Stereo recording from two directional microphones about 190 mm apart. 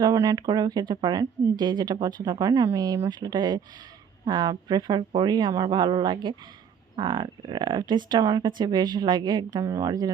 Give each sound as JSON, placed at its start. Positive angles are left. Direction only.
{"t": 0.0, "sound": "speech", "side_deg": -20}